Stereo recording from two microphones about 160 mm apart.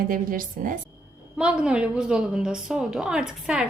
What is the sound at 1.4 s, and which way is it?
A woman's voice, 5° right (ahead or behind).